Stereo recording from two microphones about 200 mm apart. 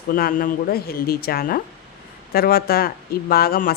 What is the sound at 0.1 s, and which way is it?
Speech, 45° left (ahead or behind).